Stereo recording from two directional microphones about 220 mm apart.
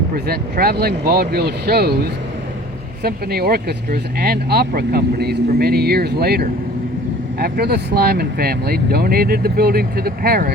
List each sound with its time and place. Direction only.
0.1 s speech: 40° right (ahead or behind)
3.0 s speech: 45° right (ahead or behind)